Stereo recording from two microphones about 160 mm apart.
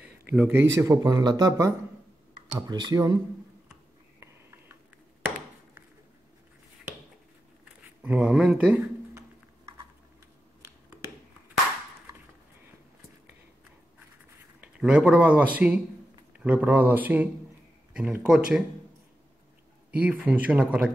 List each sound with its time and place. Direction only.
0.3 s speech: 10° right (ahead or behind)
4.2 s a sound: 15° right (ahead or behind)
8.0 s speech: 10° right (ahead or behind)
14.6 s speech: 5° right (ahead or behind)
19.9 s speech: 5° right (ahead or behind)